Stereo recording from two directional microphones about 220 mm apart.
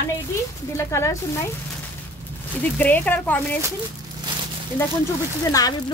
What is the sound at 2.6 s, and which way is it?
Speech, 5° left (ahead or behind).